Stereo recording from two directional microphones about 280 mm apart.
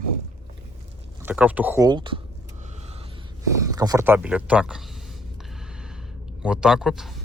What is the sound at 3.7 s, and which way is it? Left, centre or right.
Speech, centre.